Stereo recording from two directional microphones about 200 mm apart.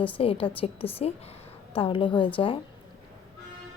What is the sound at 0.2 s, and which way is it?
A woman's voice, 30° left (ahead or behind).